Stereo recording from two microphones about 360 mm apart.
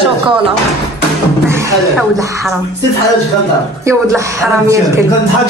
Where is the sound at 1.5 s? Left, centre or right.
Centre.